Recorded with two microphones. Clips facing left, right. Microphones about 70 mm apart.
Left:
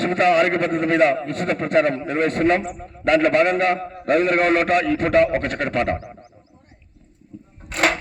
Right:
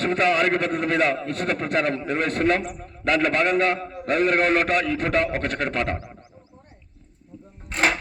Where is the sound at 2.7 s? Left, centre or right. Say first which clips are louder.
Left 5 dB; left.